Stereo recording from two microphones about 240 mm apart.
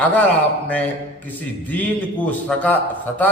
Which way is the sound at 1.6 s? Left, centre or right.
Centre.